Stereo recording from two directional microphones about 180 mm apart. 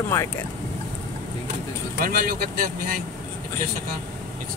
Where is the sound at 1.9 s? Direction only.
55° right (ahead or behind).